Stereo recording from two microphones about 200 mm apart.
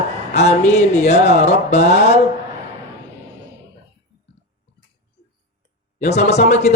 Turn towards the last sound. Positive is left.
turn(degrees=35)  # may be behind; listen again after turning